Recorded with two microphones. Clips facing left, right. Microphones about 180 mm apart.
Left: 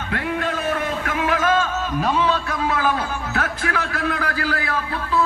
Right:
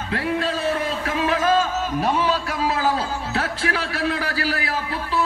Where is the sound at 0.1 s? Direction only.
30° right (ahead or behind).